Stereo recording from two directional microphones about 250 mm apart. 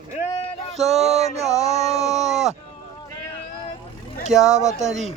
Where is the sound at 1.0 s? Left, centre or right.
Right.